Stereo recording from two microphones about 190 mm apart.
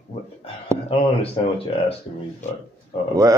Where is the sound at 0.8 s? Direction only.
30° left (ahead or behind).